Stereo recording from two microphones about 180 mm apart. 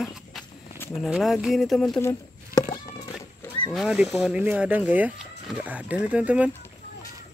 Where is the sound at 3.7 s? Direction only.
5° right (ahead or behind).